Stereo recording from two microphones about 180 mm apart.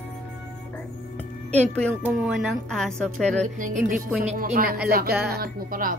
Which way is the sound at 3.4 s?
40° right (ahead or behind).